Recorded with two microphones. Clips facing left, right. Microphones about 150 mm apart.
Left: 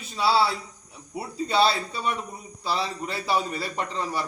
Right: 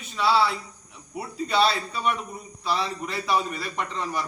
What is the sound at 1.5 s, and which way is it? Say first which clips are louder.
A man's voice: left 1 dB; 30° left (ahead or behind).